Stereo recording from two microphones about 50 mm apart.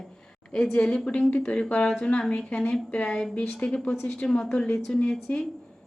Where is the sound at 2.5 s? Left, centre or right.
Left.